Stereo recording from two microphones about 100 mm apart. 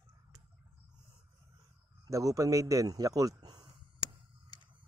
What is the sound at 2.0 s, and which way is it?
Speech, 35° right (ahead or behind).